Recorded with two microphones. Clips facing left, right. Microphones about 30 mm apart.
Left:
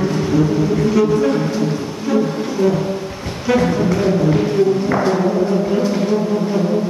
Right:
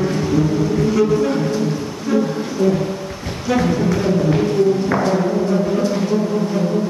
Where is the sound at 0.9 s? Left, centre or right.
Centre.